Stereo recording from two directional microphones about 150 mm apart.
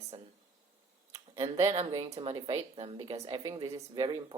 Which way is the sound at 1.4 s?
40° right (ahead or behind).